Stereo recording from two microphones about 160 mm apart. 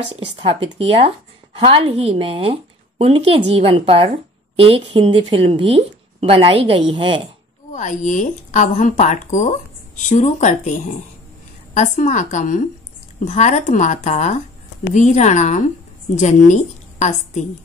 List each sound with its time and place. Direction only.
0.1 s a woman's voice: 35° right (ahead or behind)
7.7 s a woman's voice: 50° left (ahead or behind)